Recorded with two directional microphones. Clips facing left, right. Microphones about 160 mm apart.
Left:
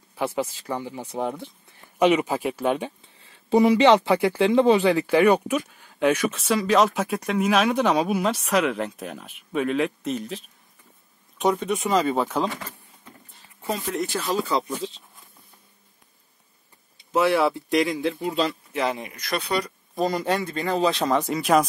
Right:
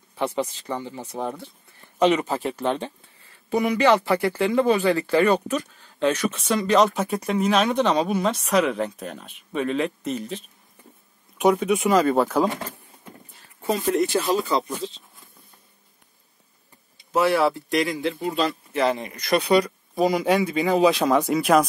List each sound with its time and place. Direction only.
0.1 s speech: 5° left (ahead or behind)
3.4 s speech: 25° left (ahead or behind); by 12.4 s centre (ahead or behind)
17.1 s speech: centre (ahead or behind)
19.3 s speech: 10° right (ahead or behind)